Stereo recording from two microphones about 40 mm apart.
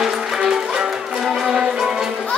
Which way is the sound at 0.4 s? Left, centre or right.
Right.